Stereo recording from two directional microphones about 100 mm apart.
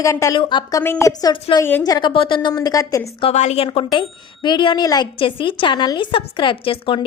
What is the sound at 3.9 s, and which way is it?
Speech, 50° left (ahead or behind).